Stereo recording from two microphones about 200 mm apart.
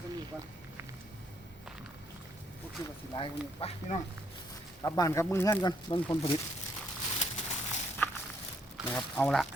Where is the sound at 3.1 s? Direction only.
30° left (ahead or behind).